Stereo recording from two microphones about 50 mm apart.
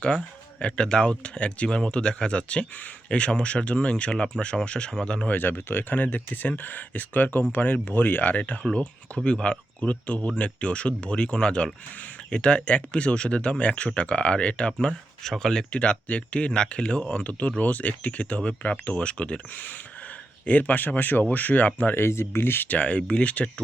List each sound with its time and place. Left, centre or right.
0.6 s speech: centre
5.3 s speech: left
8.7 s speech: centre
19.5 s speech: left
21.9 s speech: left
22.7 s speech: left